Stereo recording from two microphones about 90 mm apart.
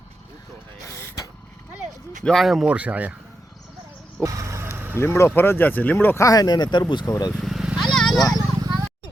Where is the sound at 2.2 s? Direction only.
Centre (ahead or behind).